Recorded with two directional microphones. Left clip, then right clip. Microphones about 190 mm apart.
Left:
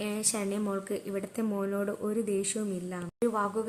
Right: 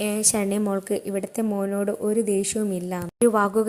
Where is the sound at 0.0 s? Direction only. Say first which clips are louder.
Right 8 dB; 30° right (ahead or behind).